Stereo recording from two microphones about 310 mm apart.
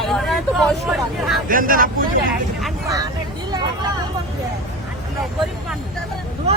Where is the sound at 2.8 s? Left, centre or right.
Centre.